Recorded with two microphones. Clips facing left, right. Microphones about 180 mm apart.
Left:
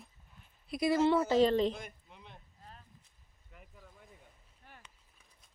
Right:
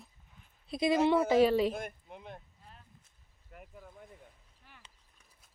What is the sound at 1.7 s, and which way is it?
Speech, 55° right (ahead or behind).